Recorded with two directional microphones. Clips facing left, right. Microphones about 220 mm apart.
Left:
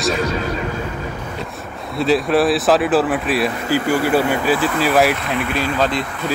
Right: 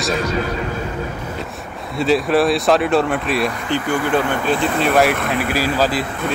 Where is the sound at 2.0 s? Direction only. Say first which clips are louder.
Even; centre (ahead or behind).